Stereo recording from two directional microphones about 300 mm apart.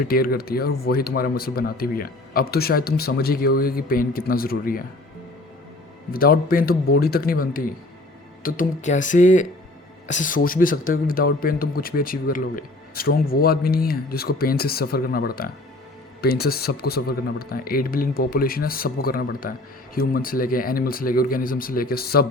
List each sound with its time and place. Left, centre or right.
0.0 s speech: left
6.1 s speech: left